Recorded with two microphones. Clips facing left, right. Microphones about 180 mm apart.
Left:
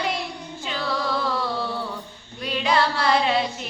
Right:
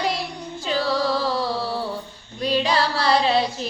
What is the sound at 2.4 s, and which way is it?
Child singing, 35° right (ahead or behind).